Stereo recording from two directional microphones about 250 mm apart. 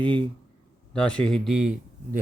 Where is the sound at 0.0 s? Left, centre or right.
Centre.